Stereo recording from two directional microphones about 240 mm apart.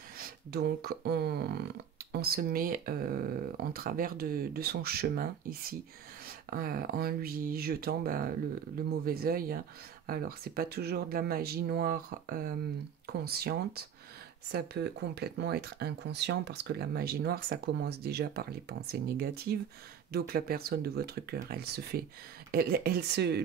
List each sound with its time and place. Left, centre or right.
0.2 s speech: right